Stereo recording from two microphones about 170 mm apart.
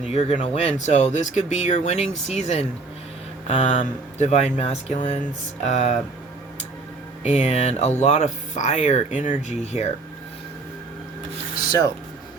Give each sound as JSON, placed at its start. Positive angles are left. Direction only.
{"t": 0.1, "sound": "speech", "side_deg": 35}
{"t": 7.2, "sound": "speech", "side_deg": 40}